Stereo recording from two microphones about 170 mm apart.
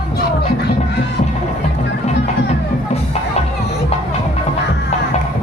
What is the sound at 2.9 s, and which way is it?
Music, 40° left (ahead or behind).